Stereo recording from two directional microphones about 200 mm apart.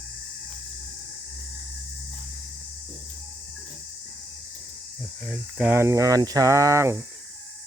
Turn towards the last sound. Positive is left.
turn(degrees=-15)  # may be behind; listen again after turning